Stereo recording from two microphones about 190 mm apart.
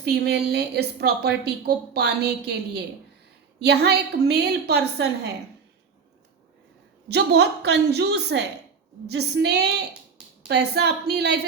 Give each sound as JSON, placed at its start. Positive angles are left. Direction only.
{"t": 0.0, "sound": "a woman's voice", "side_deg": -60}
{"t": 7.1, "sound": "a woman's voice", "side_deg": -60}